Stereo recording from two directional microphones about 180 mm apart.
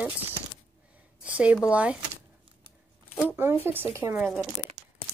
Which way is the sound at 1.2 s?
10° right (ahead or behind).